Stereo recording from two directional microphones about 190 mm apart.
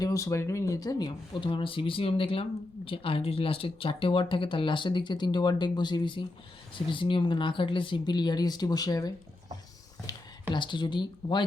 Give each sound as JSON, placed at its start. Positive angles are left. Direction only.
{"t": 0.0, "sound": "speech", "side_deg": 15}
{"t": 10.1, "sound": "a sound", "side_deg": 20}
{"t": 10.5, "sound": "speech", "side_deg": 25}